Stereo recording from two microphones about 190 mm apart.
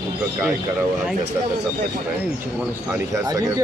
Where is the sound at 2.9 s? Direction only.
15° right (ahead or behind).